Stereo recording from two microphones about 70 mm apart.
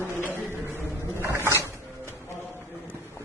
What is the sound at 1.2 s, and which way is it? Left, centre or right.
Roaring cats, right.